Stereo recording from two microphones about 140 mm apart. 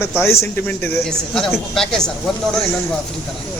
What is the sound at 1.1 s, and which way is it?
A man's voice, 5° left (ahead or behind).